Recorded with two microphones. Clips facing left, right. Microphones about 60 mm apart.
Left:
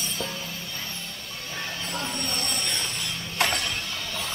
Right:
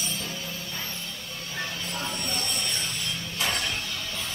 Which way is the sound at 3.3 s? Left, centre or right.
Left.